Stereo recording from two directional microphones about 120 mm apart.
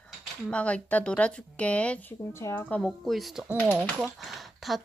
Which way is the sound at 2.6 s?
10° left (ahead or behind).